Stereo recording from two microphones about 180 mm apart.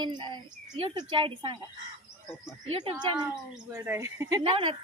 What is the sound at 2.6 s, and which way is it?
Speech, 30° right (ahead or behind).